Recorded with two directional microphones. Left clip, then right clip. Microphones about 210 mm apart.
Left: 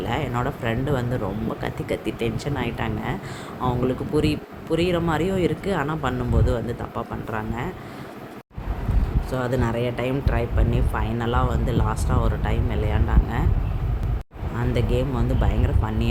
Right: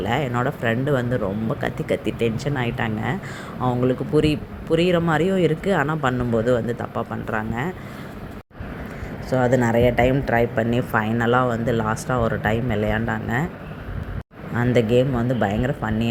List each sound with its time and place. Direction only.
0.0 s speech: 15° right (ahead or behind)
9.3 s speech: 15° right (ahead or behind)
14.5 s speech: 20° right (ahead or behind)